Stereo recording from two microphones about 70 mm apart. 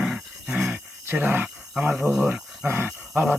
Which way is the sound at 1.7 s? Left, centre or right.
Centre.